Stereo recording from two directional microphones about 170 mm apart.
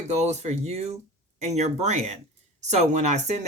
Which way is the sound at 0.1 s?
40° right (ahead or behind).